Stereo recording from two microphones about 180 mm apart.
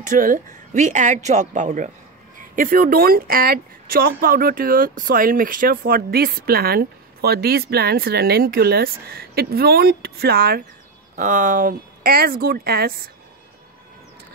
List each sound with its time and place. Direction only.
0.0 s speech: 45° right (ahead or behind)
11.1 s speech: 45° right (ahead or behind)